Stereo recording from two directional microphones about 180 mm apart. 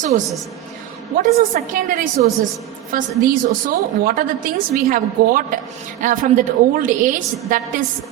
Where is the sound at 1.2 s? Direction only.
45° right (ahead or behind).